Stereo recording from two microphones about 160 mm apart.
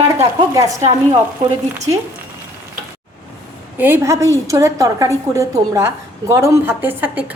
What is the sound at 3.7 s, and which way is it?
A woman's voice, 15° right (ahead or behind).